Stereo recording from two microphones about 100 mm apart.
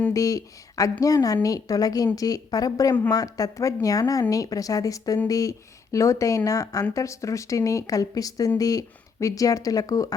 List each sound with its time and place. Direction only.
0.1 s speech: 35° left (ahead or behind)